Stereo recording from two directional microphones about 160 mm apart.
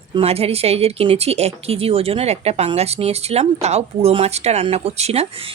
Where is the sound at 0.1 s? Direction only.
40° right (ahead or behind).